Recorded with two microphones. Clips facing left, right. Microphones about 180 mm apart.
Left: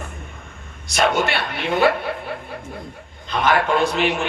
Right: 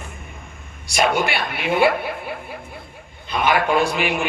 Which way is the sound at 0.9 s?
10° right (ahead or behind).